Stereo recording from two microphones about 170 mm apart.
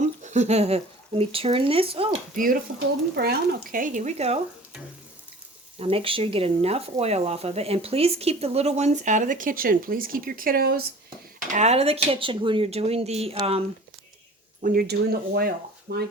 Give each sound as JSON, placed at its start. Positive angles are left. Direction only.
{"t": 0.0, "sound": "a sound", "side_deg": -45}
{"t": 1.2, "sound": "speech", "side_deg": -35}
{"t": 2.3, "sound": "speech", "side_deg": -55}
{"t": 5.8, "sound": "speech", "side_deg": -35}
{"t": 11.3, "sound": "speech", "side_deg": -45}
{"t": 14.6, "sound": "speech", "side_deg": -60}